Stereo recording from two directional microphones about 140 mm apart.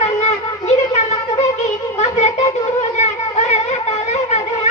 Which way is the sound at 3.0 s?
50° left (ahead or behind).